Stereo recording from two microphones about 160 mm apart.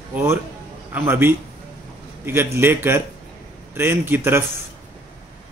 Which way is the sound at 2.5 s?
15° right (ahead or behind).